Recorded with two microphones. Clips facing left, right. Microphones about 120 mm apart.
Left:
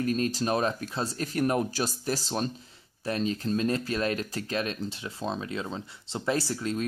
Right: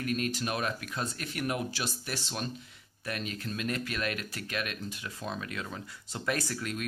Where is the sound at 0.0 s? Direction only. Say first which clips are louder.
Left 5 dB; 35° left (ahead or behind).